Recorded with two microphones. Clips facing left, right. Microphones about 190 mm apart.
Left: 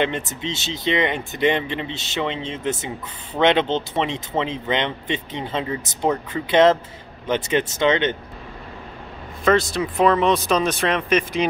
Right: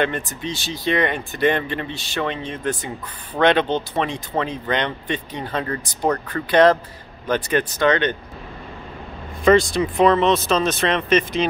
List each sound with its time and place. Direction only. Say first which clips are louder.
0.0 s speech: even; 20° left (ahead or behind)
5.7 s speech: right 1 dB; 5° left (ahead or behind)
6.5 s speech: right 1 dB; 20° left (ahead or behind)
9.4 s speech: right 3 dB; centre (ahead or behind)